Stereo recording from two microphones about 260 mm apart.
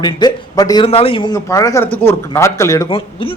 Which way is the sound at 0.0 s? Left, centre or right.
Centre.